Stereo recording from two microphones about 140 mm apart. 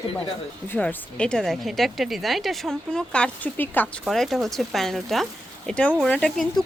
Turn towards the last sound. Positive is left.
turn(degrees=5)  # may be behind; listen again after turning